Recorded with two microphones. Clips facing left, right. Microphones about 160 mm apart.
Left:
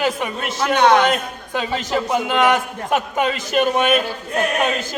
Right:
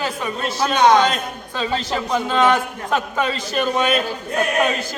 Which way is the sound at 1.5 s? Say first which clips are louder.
Left 2 dB; 15° left (ahead or behind).